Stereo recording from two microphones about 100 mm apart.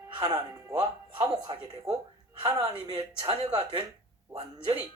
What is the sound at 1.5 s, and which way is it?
Speech, 45° right (ahead or behind).